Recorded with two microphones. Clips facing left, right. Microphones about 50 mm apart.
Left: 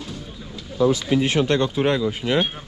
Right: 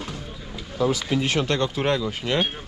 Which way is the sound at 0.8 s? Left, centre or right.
Right.